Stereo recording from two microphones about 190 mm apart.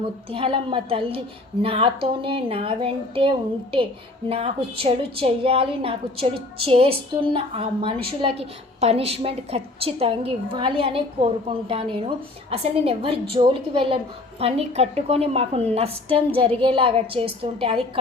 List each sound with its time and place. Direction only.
0.3 s a woman's voice: 30° right (ahead or behind)